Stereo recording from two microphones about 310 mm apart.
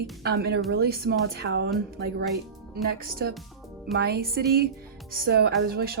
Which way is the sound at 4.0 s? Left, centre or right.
Right.